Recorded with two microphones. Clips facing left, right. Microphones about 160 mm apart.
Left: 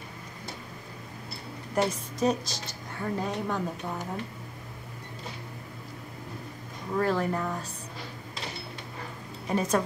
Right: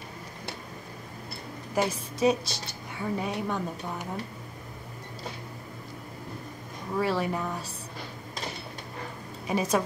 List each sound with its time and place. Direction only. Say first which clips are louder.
1.8 s a woman's voice: right 1 dB; 5° right (ahead or behind)
2.4 s speech: right 1 dB; 70° right (ahead or behind)
3.0 s a woman's voice: even; 5° right (ahead or behind)
7.0 s a woman's voice: left 1 dB; 5° right (ahead or behind)
9.5 s a woman's voice: even; 10° right (ahead or behind)